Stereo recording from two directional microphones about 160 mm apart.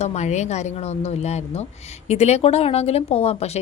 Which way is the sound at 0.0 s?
45° left (ahead or behind).